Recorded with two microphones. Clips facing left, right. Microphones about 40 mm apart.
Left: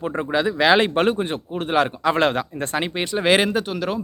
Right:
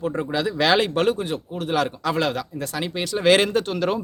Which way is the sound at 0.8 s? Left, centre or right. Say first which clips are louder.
Left 2 dB; left.